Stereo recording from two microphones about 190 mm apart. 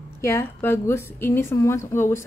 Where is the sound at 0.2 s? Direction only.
15° left (ahead or behind).